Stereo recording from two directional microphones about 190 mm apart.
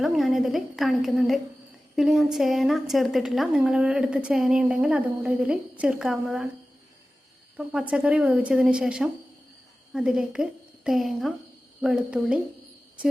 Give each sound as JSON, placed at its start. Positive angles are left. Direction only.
{"t": 0.0, "sound": "a woman's voice", "side_deg": 0}
{"t": 7.5, "sound": "a woman's voice", "side_deg": -5}